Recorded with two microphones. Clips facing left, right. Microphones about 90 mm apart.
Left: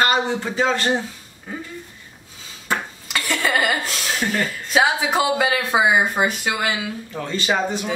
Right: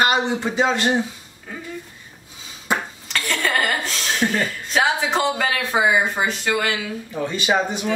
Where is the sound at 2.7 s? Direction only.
15° right (ahead or behind).